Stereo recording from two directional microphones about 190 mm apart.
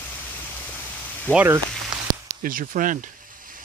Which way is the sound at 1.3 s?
10° right (ahead or behind).